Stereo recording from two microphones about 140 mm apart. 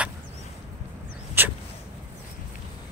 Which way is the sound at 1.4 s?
15° right (ahead or behind).